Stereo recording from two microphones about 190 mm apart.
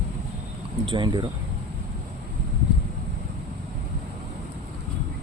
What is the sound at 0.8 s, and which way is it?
Speech, 25° right (ahead or behind).